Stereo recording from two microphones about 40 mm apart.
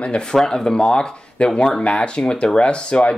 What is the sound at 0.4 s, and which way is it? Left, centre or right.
Speech, centre.